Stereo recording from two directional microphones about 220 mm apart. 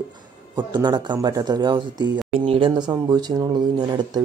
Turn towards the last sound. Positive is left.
turn(degrees=-20)  # may be behind; listen again after turning